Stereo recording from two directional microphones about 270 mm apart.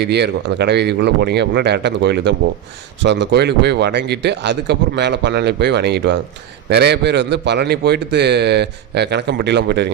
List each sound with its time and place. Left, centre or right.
0.0 s a man's voice: right